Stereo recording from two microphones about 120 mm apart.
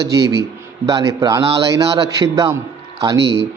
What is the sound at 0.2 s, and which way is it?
A man's voice, 25° right (ahead or behind).